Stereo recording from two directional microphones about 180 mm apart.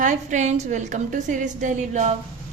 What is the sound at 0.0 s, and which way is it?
A woman's voice, 45° right (ahead or behind).